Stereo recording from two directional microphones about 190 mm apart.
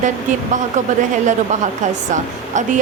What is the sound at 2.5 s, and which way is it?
Speech, 40° right (ahead or behind).